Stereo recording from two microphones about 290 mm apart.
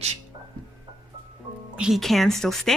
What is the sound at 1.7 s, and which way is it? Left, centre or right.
Speech, centre.